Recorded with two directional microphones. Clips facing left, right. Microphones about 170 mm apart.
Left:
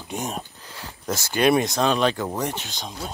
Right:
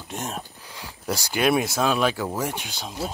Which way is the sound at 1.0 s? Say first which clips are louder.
Left 2 dB; 10° right (ahead or behind).